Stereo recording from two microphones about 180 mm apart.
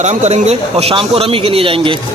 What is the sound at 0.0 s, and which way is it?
A man's voice, 40° right (ahead or behind).